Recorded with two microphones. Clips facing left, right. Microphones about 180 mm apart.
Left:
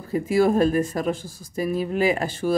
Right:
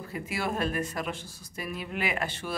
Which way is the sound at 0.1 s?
40° left (ahead or behind).